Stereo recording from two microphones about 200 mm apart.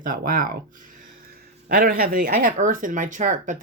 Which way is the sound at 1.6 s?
50° right (ahead or behind).